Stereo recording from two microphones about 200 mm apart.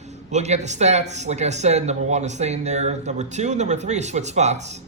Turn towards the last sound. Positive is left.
turn(degrees=-35)  # may be behind; listen again after turning